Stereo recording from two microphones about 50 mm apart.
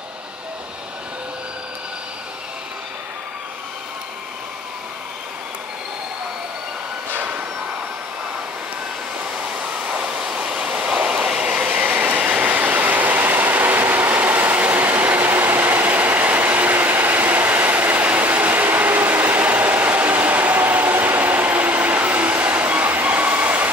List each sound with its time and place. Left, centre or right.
7.1 s train: right
9.4 s waterfall: right
12.2 s train: right